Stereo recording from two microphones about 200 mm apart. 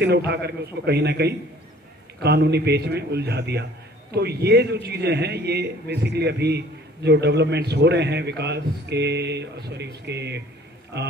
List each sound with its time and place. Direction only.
0.0 s a man's voice: 55° right (ahead or behind)